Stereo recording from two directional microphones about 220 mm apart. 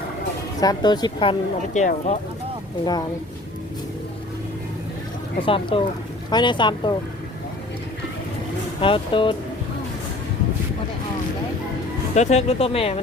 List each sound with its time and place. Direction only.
0.6 s speech: 20° left (ahead or behind)
5.4 s speech: 25° left (ahead or behind)
8.8 s speech: 25° left (ahead or behind)
12.1 s speech: 30° left (ahead or behind)